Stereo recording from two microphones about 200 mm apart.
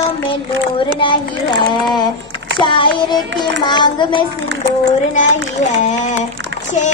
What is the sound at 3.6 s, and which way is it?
Speech, 20° left (ahead or behind).